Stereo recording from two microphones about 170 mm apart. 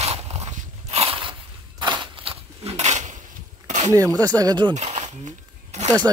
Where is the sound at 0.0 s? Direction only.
40° right (ahead or behind).